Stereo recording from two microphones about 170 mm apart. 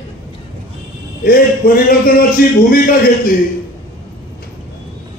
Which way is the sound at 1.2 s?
60° left (ahead or behind).